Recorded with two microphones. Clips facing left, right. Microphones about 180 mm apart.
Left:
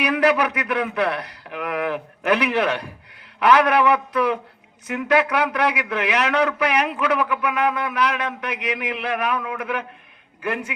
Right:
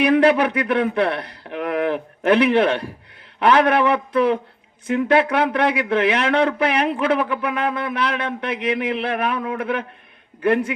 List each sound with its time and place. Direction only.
0.0 s a man's voice: 30° right (ahead or behind)